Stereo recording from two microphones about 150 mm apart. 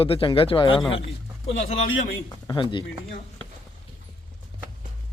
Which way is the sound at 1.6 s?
55° left (ahead or behind).